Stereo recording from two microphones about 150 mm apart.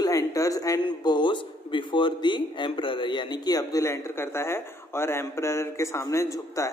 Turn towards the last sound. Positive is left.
turn(degrees=20)  # may be behind; listen again after turning